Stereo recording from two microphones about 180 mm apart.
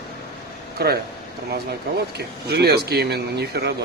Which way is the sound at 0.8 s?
60° right (ahead or behind).